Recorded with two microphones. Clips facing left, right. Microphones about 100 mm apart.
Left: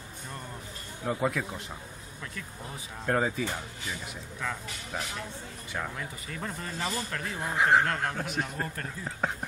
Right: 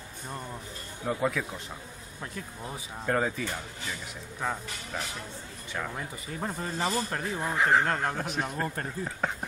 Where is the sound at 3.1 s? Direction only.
5° left (ahead or behind).